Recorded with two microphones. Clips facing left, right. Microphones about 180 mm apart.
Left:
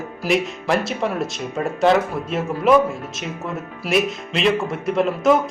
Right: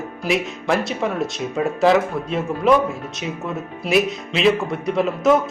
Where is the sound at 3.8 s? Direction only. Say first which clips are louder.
Right 1 dB; centre (ahead or behind).